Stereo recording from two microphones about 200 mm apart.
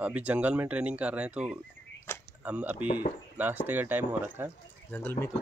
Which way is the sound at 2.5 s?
5° right (ahead or behind).